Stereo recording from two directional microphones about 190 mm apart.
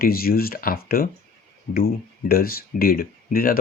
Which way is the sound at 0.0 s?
55° left (ahead or behind).